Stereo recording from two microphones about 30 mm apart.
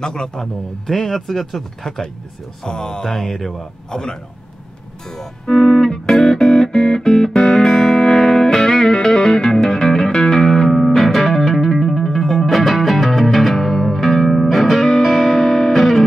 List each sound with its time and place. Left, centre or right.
0.0 s speech: left
2.6 s speech: left
3.9 s speech: left
5.7 s music: centre
10.4 s music: centre